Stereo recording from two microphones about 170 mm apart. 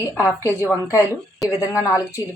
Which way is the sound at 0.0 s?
15° left (ahead or behind).